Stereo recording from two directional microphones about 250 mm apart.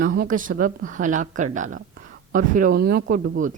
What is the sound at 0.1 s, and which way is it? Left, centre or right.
A woman's voice, right.